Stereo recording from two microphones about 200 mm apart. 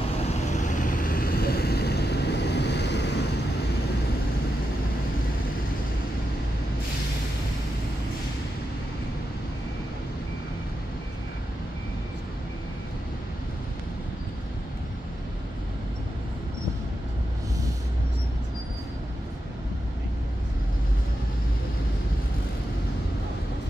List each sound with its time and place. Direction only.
0.2 s vehicle: 35° left (ahead or behind); by 3.3 s 60° left (ahead or behind)